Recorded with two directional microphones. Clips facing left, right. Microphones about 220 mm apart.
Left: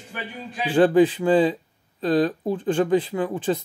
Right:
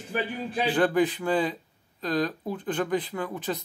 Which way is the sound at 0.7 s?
30° left (ahead or behind).